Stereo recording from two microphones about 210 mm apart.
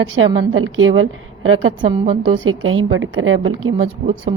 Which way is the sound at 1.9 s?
25° right (ahead or behind).